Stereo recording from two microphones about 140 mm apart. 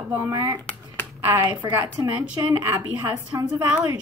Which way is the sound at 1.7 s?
15° right (ahead or behind).